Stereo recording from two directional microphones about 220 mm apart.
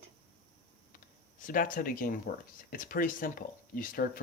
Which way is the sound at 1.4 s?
40° left (ahead or behind).